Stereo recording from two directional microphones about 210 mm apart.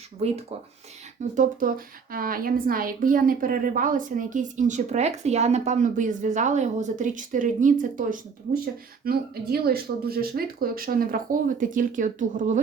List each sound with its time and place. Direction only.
0.2 s a woman's voice: 30° right (ahead or behind)